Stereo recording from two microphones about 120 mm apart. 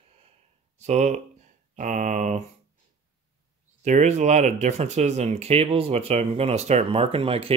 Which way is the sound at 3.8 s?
80° right.